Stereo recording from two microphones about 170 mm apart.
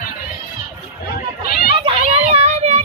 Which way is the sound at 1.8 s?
35° right (ahead or behind).